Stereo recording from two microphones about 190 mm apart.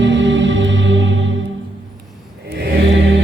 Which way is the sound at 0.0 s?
75° right (ahead or behind).